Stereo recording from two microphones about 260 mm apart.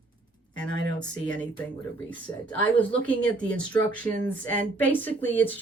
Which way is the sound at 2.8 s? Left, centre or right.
Centre.